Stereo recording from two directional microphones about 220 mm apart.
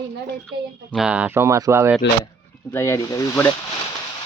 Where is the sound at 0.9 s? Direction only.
5° right (ahead or behind).